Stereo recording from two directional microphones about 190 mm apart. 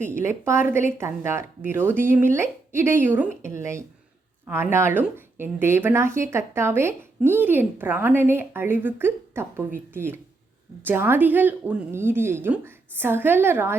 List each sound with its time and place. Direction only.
0.0 s a woman's voice: 15° right (ahead or behind)